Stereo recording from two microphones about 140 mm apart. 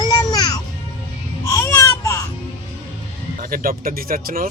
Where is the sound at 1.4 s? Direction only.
20° left (ahead or behind).